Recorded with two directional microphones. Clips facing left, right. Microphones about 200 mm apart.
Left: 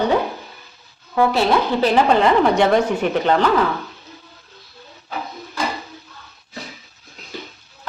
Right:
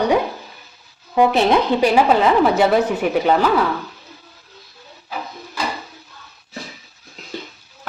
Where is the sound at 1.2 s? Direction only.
20° right (ahead or behind).